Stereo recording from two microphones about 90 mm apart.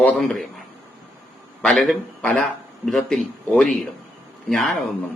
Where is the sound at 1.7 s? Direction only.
5° left (ahead or behind).